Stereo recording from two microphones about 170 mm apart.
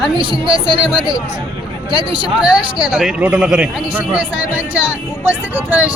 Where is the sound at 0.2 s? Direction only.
30° left (ahead or behind).